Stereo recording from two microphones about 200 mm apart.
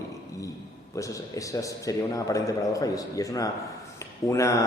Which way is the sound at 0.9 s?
15° left (ahead or behind).